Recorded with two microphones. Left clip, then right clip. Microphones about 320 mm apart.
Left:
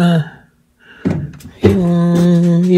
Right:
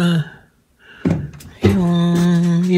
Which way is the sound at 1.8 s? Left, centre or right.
Right.